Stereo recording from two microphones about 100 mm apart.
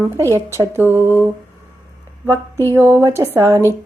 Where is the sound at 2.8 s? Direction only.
25° right (ahead or behind).